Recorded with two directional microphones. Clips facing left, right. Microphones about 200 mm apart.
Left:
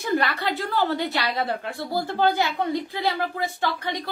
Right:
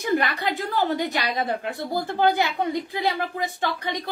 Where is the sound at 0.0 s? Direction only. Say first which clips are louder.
Right 1 dB; 15° right (ahead or behind).